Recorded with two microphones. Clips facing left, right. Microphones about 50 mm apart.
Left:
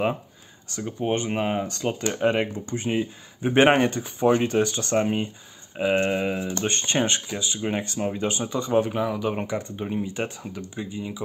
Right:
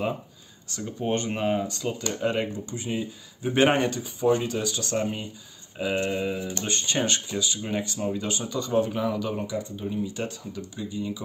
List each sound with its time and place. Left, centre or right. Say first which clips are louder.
0.7 s speech: left 2 dB; left
1.7 s speech: left 3 dB; left
4.0 s speech: left 3 dB; left
8.9 s speech: left 1 dB; centre
9.3 s speech: left 2 dB; left